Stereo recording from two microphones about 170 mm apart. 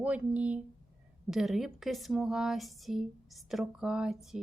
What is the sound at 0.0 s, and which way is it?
A woman's voice, 10° right (ahead or behind).